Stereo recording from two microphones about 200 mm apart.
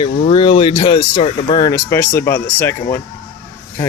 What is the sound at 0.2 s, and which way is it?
Speech, 25° left (ahead or behind).